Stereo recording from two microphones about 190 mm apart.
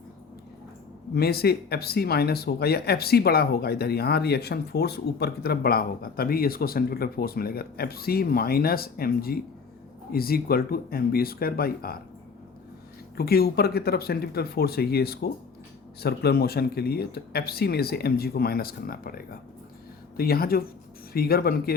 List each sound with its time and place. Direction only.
1.1 s speech: 55° left (ahead or behind)
13.1 s speech: 55° left (ahead or behind)